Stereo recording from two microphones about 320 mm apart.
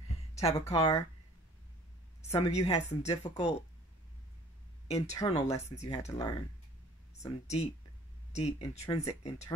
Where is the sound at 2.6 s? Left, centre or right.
Centre.